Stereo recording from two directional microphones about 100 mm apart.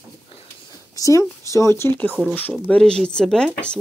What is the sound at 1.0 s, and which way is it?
Speech, 35° left (ahead or behind).